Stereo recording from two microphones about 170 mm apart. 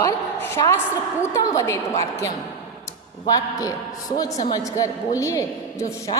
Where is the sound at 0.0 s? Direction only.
20° left (ahead or behind).